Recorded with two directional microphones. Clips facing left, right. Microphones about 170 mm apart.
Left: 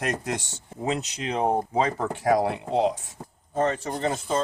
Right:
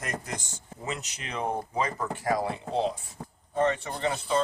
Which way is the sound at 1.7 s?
70° left (ahead or behind).